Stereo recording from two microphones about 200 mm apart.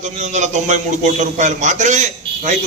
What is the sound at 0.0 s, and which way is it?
A man's voice, 35° right (ahead or behind).